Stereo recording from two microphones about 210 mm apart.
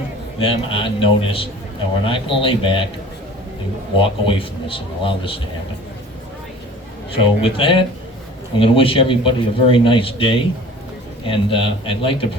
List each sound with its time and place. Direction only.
0.3 s a man's voice: 25° left (ahead or behind)
4.0 s a man's voice: 25° left (ahead or behind)
7.1 s a man's voice: 25° left (ahead or behind)